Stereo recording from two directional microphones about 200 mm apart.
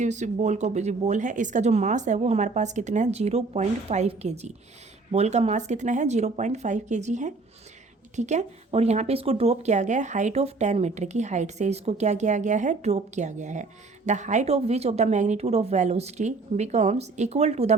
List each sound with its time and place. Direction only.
0.0 s speech: 35° right (ahead or behind)